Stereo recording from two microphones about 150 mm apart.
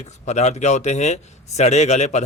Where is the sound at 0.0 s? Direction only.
50° left (ahead or behind).